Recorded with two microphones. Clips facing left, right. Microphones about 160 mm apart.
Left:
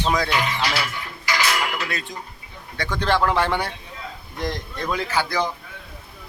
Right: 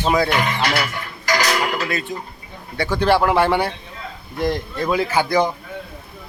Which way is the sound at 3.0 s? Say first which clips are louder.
Right 4 dB; 10° right (ahead or behind).